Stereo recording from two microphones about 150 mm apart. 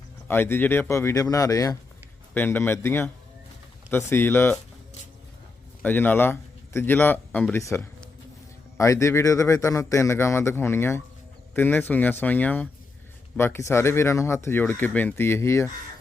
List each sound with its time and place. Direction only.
0.3 s a man's voice: 15° left (ahead or behind)
5.8 s a man's voice: 10° left (ahead or behind)